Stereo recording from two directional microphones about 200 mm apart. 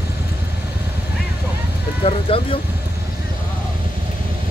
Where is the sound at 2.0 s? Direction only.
30° left (ahead or behind).